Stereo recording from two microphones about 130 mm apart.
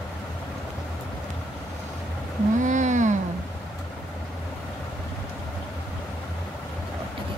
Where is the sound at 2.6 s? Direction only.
75° right (ahead or behind).